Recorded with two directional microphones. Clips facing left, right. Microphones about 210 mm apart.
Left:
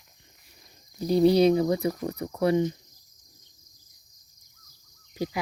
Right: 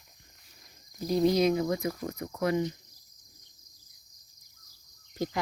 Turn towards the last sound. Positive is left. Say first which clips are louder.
# left 2 dB
turn(degrees=10)  # may be behind; listen again after turning